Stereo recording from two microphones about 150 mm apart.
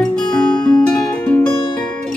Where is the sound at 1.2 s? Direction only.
10° left (ahead or behind).